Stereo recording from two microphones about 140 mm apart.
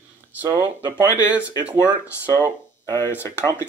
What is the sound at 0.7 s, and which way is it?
Speech, 10° right (ahead or behind).